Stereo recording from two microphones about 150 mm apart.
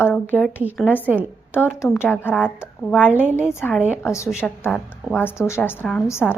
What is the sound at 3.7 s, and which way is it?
Speech, 5° right (ahead or behind).